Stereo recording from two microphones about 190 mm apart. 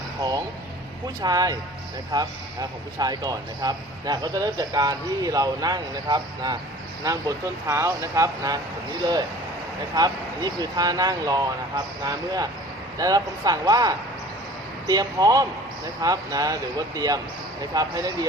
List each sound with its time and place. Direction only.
0.2 s a man's voice: 20° right (ahead or behind)